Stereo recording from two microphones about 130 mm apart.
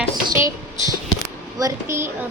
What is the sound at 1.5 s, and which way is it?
Speech, 25° right (ahead or behind).